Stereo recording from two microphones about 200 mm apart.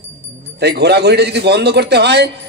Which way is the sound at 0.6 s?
55° right (ahead or behind).